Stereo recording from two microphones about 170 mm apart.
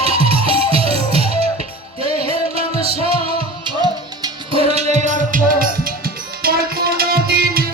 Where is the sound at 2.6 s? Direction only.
35° right (ahead or behind).